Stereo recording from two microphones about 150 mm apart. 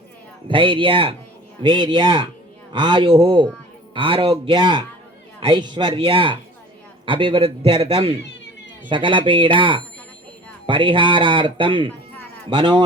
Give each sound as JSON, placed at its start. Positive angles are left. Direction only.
{"t": 0.4, "sound": "speech", "side_deg": -35}